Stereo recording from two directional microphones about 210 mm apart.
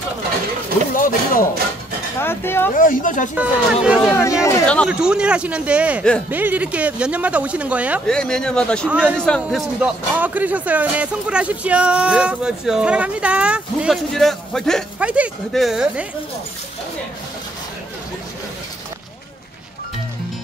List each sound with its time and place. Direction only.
0.9 s speech: 40° left (ahead or behind)
2.1 s speech: 10° left (ahead or behind)
2.7 s speech: 40° left (ahead or behind)
3.3 s a man's voice: 5° right (ahead or behind)
4.1 s speech: 10° left (ahead or behind)
4.8 s a man's voice: 5° right (ahead or behind)